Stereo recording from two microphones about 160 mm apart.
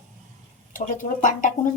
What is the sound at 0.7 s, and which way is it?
Speech, 55° left (ahead or behind).